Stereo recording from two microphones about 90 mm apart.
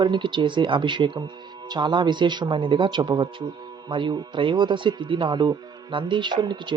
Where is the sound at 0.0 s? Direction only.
60° right (ahead or behind).